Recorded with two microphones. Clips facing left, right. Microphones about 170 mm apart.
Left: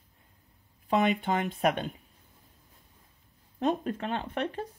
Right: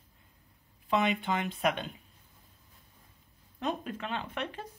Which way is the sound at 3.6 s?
45° left (ahead or behind).